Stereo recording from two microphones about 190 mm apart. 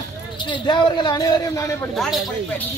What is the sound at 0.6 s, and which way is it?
Speech, 25° left (ahead or behind).